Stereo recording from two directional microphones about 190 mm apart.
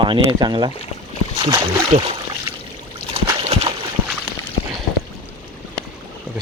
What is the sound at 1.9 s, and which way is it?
Speech, 40° right (ahead or behind).